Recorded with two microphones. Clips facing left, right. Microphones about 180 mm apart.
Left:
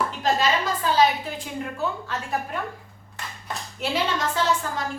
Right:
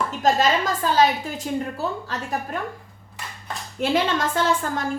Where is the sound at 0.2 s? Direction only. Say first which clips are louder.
Right 4 dB; 45° right (ahead or behind).